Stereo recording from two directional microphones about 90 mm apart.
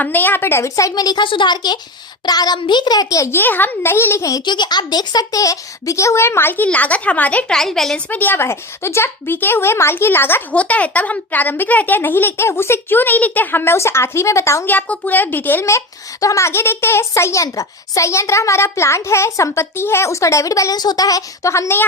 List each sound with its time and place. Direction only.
0.0 s a woman's voice: 20° left (ahead or behind); by 1.2 s 45° left (ahead or behind)
1.2 s a child's voice: 65° left (ahead or behind); by 3.3 s 40° left (ahead or behind)
3.3 s a woman's voice: 20° left (ahead or behind)
4.4 s a child's voice: 55° left (ahead or behind); by 8.0 s 5° left (ahead or behind)
8.1 s a woman's voice: 20° left (ahead or behind)
14.7 s a woman's voice: 20° left (ahead or behind)
16.2 s a child's voice: 35° left (ahead or behind)